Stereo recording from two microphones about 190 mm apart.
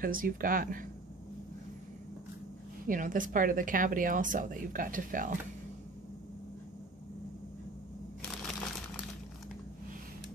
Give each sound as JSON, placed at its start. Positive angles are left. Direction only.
{"t": 0.0, "sound": "a woman's voice", "side_deg": -45}
{"t": 2.9, "sound": "a woman's voice", "side_deg": -45}